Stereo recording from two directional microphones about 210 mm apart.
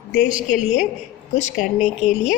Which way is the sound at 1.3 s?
35° left (ahead or behind).